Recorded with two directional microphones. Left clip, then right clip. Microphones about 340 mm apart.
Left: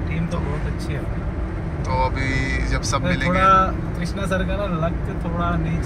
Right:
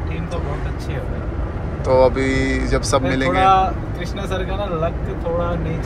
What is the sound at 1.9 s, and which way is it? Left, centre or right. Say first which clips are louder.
Speech: right 8 dB; centre.